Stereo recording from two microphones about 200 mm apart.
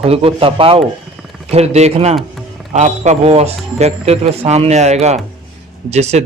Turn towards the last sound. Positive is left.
turn(degrees=-35)  # may be behind; listen again after turning